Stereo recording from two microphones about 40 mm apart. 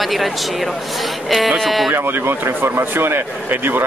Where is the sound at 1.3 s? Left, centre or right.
Centre.